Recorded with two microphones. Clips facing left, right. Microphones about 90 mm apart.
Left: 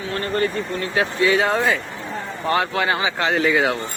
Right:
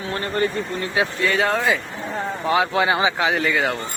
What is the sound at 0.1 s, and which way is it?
Speech, 25° right (ahead or behind).